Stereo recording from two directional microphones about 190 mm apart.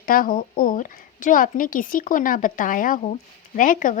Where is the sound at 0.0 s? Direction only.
50° left (ahead or behind).